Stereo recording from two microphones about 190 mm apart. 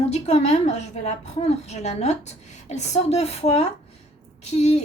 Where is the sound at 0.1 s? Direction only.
35° left (ahead or behind).